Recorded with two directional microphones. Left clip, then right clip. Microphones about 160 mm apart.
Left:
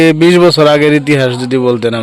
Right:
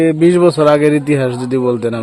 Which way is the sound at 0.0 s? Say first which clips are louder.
Left 4 dB; 20° left (ahead or behind).